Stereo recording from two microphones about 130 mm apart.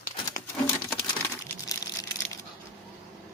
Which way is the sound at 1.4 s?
25° left (ahead or behind).